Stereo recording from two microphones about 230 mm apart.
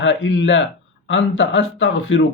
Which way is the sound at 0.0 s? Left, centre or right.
Left.